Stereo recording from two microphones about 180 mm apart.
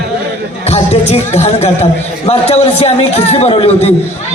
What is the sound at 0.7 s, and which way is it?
A man's voice, 35° left (ahead or behind).